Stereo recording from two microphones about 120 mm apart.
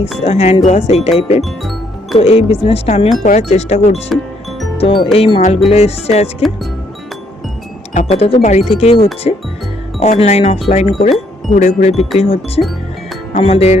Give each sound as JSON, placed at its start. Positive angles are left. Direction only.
{"t": 0.2, "sound": "speech", "side_deg": 60}
{"t": 1.5, "sound": "music", "side_deg": 0}
{"t": 2.1, "sound": "speech", "side_deg": 55}
{"t": 3.2, "sound": "speech", "side_deg": 80}
{"t": 4.8, "sound": "speech", "side_deg": 45}
{"t": 8.1, "sound": "speech", "side_deg": 55}
{"t": 9.2, "sound": "speech", "side_deg": 65}
{"t": 11.5, "sound": "speech", "side_deg": 80}